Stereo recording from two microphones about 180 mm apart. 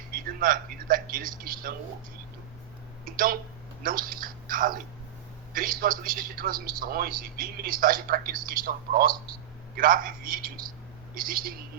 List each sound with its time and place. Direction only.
0.1 s speech: 55° right (ahead or behind)
3.0 s a sound: 50° right (ahead or behind)
3.8 s a man's voice: 50° right (ahead or behind)